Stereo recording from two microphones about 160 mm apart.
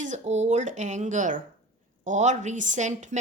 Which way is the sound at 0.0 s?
50° right (ahead or behind).